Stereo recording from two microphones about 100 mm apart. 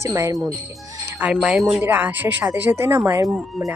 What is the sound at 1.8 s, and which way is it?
Speech, 15° right (ahead or behind).